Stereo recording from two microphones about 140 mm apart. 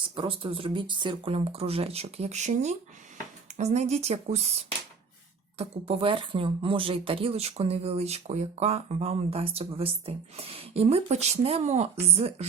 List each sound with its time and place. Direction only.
0.2 s speech: 40° right (ahead or behind)
5.5 s speech: 45° right (ahead or behind)